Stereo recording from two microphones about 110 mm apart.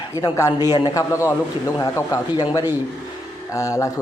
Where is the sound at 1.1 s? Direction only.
30° left (ahead or behind).